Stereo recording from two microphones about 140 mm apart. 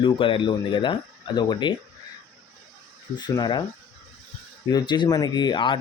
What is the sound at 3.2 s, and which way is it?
Speech, 30° left (ahead or behind).